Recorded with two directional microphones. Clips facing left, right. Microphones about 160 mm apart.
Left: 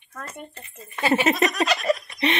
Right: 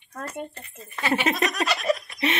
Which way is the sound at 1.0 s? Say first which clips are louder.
Left 4 dB; 30° left (ahead or behind).